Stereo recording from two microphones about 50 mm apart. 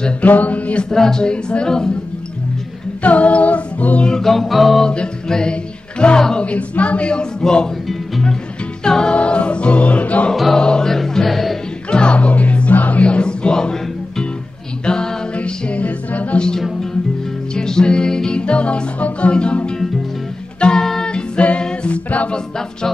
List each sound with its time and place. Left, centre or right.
0.2 s speech: left
0.8 s a woman's voice: centre
3.0 s a capella: left
4.1 s music: centre
4.8 s music: centre
6.1 s a woman's voice: centre
6.4 s speech: left
8.8 s a woman's voice: centre
9.1 s speech: left
10.3 s music: centre
10.6 s music: centre
11.9 s music: left
16.3 s music: centre
20.6 s a capella: centre